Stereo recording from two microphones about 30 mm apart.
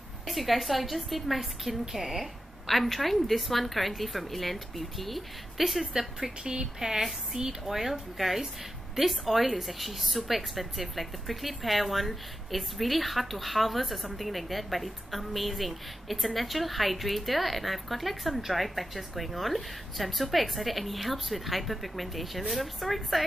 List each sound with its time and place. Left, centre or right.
0.3 s a woman's voice: centre
2.6 s a woman's voice: centre
6.4 s a woman's voice: right; by 23.2 s centre